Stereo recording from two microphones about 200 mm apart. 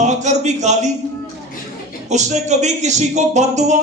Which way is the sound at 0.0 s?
35° right (ahead or behind).